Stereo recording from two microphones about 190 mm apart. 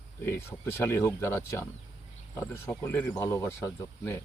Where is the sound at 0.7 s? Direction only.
10° left (ahead or behind).